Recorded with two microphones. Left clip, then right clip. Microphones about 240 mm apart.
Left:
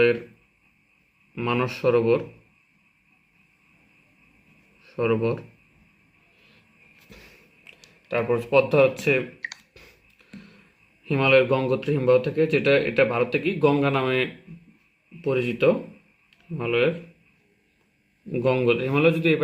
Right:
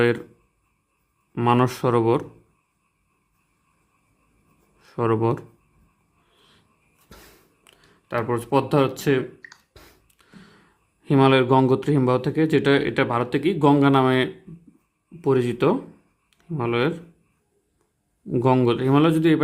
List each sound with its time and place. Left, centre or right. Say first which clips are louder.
1.4 s speech: right 5 dB; right
4.8 s speech: right 1 dB; right
8.0 s speech: left 1 dB; right
11.0 s speech: right 1 dB; right
15.3 s speech: right 1 dB; right
18.3 s speech: right 2 dB; right